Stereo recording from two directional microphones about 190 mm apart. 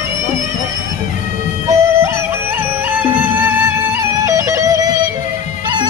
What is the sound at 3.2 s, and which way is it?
Music, 10° right (ahead or behind).